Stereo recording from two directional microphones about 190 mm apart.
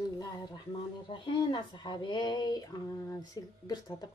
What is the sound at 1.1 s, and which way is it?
Speech, 25° left (ahead or behind).